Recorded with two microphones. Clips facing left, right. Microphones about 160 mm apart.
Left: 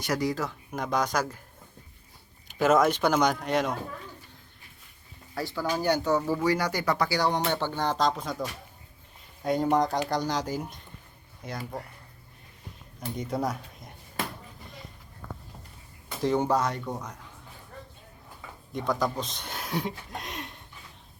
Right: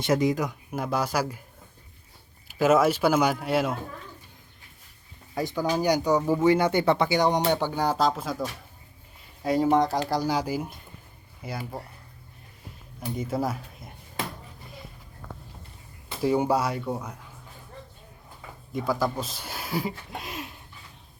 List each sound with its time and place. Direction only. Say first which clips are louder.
0.0 s speech: right 5 dB; 25° right (ahead or behind)
2.5 s speech: right 2 dB; 5° right (ahead or behind)
5.3 s speech: right 4 dB; 15° right (ahead or behind)
13.0 s speech: right 2 dB; 5° right (ahead or behind)
16.2 s speech: right 2 dB; 10° right (ahead or behind)
18.7 s speech: right 2 dB; 5° right (ahead or behind)